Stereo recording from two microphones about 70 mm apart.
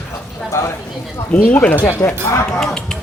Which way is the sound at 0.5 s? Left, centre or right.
Left.